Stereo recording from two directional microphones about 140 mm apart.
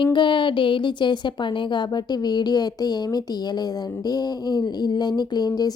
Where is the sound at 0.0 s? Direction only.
35° left (ahead or behind).